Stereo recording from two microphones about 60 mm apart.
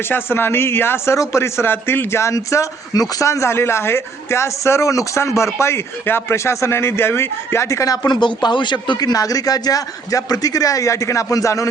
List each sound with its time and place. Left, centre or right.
0.1 s speech: left
2.3 s a man's voice: left
3.2 s speech: left
6.3 s speech: left
7.7 s speech: left
9.0 s a man's voice: left